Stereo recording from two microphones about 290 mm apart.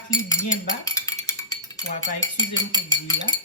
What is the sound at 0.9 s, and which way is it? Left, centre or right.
Cutlery, centre.